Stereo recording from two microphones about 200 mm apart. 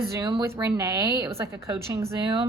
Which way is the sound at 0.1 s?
20° right (ahead or behind).